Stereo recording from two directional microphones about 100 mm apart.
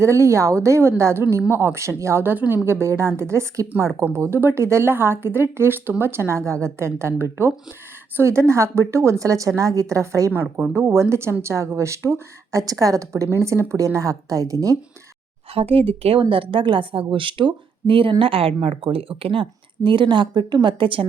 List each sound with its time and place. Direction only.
0.0 s a woman's voice: 30° right (ahead or behind)
15.5 s speech: 75° right (ahead or behind)
16.3 s speech: 60° right (ahead or behind)